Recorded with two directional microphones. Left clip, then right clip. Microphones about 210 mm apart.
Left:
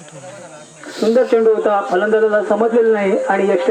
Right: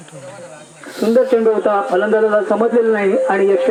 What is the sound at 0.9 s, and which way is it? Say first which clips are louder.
Speech: left 1 dB; centre (ahead or behind).